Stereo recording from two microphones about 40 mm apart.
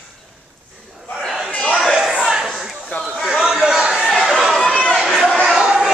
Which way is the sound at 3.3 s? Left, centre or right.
Centre.